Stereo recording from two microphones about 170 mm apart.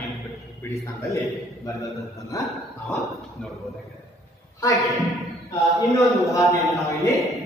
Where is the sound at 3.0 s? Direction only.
Centre (ahead or behind).